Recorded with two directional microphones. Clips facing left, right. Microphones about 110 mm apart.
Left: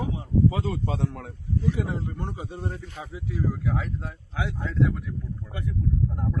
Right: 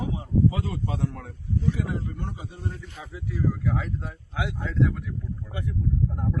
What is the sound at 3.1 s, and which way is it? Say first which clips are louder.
Speech: right 2 dB; 20° left (ahead or behind).